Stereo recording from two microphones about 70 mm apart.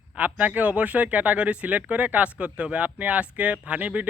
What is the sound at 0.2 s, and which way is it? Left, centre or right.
Speech, right.